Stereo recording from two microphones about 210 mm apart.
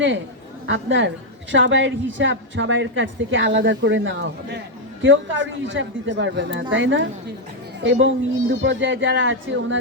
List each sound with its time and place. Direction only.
0.7 s a woman's voice: 60° right (ahead or behind)